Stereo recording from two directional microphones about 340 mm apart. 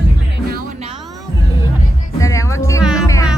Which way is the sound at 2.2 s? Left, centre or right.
Centre.